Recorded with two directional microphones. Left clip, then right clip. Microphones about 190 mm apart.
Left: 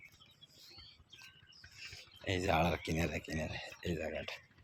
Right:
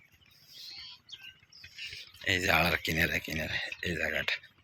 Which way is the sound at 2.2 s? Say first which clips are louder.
Right 6 dB; 5° left (ahead or behind).